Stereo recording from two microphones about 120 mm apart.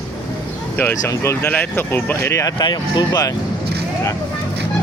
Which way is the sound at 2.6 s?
40° left (ahead or behind).